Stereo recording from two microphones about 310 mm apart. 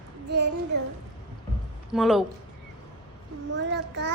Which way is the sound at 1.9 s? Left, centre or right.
Centre.